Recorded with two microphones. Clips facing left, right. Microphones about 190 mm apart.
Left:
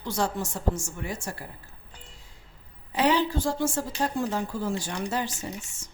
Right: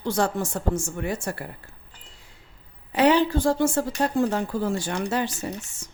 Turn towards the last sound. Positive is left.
turn(degrees=-65)  # may be behind; listen again after turning